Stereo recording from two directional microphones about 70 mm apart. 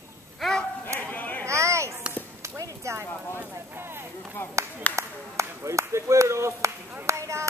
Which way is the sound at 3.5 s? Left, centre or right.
Right.